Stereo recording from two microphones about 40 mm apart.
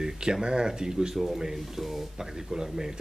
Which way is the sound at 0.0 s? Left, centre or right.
Centre.